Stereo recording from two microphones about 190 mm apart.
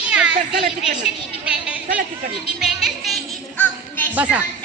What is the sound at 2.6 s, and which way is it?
Music, centre (ahead or behind).